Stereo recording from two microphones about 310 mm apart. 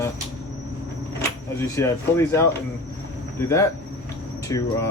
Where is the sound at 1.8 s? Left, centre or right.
Centre.